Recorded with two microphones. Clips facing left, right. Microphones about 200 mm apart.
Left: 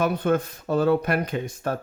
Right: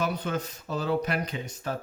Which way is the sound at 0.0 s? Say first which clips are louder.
Left 7 dB; 55° left (ahead or behind).